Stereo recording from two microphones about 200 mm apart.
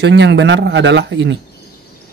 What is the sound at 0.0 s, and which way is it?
Speech, 60° right (ahead or behind).